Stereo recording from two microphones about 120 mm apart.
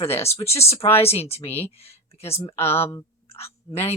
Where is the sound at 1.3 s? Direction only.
60° left (ahead or behind).